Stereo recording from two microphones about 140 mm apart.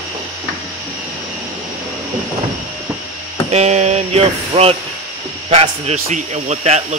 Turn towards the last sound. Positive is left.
turn(degrees=-55)  # may be behind; listen again after turning